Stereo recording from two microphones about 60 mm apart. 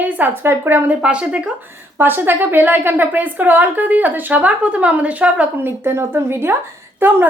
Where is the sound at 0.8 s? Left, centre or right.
Centre.